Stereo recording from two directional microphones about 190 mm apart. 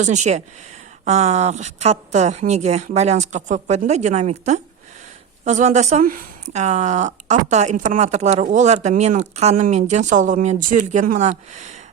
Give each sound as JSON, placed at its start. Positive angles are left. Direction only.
{"t": 0.0, "sound": "speech", "side_deg": -40}